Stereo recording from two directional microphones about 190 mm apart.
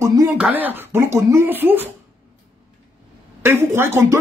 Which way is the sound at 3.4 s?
10° right (ahead or behind).